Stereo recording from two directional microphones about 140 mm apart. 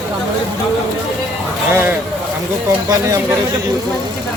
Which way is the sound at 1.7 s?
15° right (ahead or behind).